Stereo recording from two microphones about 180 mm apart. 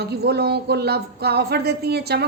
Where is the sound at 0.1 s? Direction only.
65° right (ahead or behind).